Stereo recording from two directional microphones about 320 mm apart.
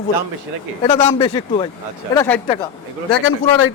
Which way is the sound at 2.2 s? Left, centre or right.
Centre.